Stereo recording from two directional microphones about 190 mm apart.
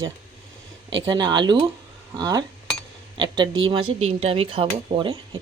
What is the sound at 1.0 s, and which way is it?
Speech, 20° right (ahead or behind).